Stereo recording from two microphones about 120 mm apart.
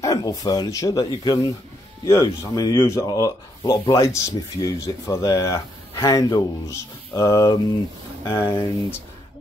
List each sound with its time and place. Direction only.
0.0 s speech: 30° left (ahead or behind)